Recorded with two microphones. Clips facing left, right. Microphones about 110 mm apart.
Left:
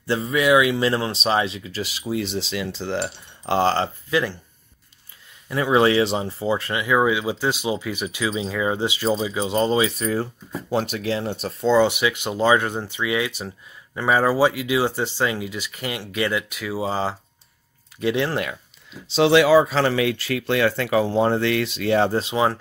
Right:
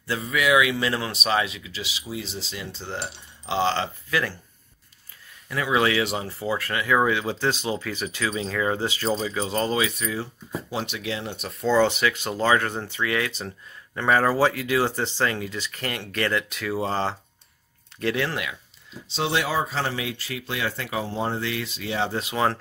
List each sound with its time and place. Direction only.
0.0 s speech: 30° left (ahead or behind)
1.6 s speech: 45° left (ahead or behind); by 3.0 s 90° left
3.4 s speech: 45° left (ahead or behind)
4.1 s speech: 20° left (ahead or behind)
5.5 s speech: 30° left (ahead or behind); by 9.6 s 10° left (ahead or behind)
9.6 s speech: 30° left (ahead or behind)
10.7 s speech: 45° left (ahead or behind)
11.7 s speech: 10° left (ahead or behind)
18.3 s speech: 40° left (ahead or behind)
19.0 s speech: 90° left; by 22.1 s 55° left (ahead or behind)
22.3 s speech: 10° left (ahead or behind)